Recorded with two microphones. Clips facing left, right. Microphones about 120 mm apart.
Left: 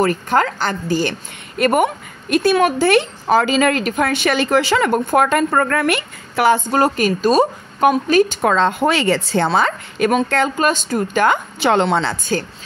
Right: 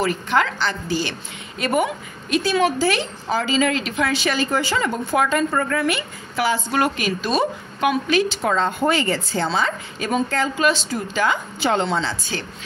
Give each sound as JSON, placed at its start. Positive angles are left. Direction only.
{"t": 0.0, "sound": "a woman's voice", "side_deg": 45}
{"t": 6.8, "sound": "a woman's voice", "side_deg": 45}
{"t": 8.5, "sound": "a woman's voice", "side_deg": 90}
{"t": 10.6, "sound": "a woman's voice", "side_deg": 50}